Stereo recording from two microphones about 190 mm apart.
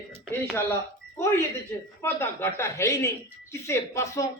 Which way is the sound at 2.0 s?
15° left (ahead or behind).